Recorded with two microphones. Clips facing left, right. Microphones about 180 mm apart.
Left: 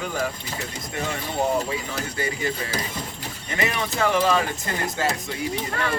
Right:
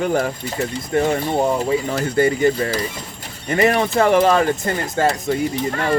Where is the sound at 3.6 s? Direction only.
55° right (ahead or behind).